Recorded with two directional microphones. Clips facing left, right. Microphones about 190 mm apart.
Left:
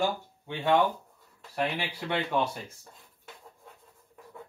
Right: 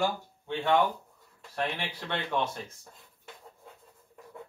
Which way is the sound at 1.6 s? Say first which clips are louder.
Left 2 dB; 10° left (ahead or behind).